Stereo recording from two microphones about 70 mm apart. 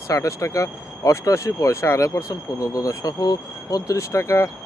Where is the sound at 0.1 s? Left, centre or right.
Left.